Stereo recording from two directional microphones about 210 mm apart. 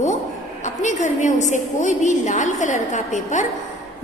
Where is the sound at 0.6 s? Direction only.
35° left (ahead or behind).